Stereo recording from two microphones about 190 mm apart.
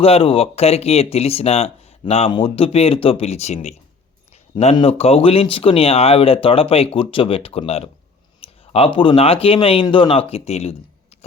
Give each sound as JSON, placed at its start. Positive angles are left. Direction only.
{"t": 0.0, "sound": "speech", "side_deg": 30}